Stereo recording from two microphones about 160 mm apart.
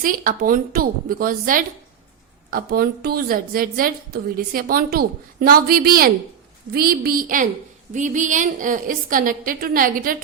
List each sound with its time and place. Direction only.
0.0 s a woman's voice: 60° right (ahead or behind)